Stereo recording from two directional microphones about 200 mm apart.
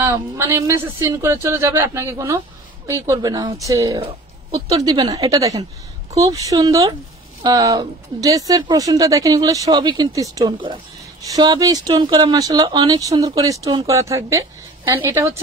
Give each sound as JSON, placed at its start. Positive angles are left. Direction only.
{"t": 0.0, "sound": "speech", "side_deg": -15}